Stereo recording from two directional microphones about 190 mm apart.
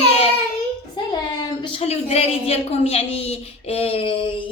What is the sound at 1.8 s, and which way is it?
A child's voice, 35° left (ahead or behind).